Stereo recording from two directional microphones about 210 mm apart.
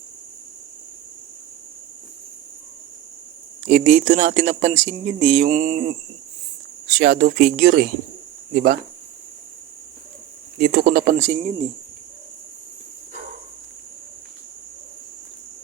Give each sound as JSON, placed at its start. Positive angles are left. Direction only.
{"t": 3.7, "sound": "speech", "side_deg": -35}
{"t": 7.0, "sound": "speech", "side_deg": -40}
{"t": 10.6, "sound": "speech", "side_deg": -45}